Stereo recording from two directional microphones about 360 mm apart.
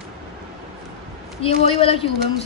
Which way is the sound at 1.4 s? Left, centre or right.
Centre.